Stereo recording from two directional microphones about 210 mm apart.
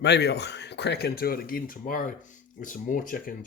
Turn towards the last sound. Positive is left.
turn(degrees=40)  # may be behind; listen again after turning